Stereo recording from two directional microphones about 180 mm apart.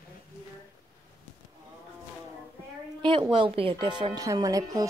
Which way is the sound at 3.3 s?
30° right (ahead or behind).